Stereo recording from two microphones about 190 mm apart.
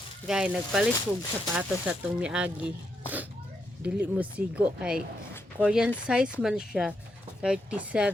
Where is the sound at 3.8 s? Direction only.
10° right (ahead or behind).